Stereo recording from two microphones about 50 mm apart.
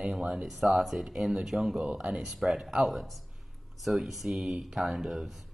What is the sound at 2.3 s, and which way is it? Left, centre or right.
Speech, centre.